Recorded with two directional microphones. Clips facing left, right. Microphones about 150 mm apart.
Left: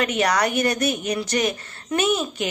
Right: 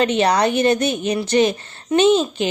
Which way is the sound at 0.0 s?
30° right (ahead or behind).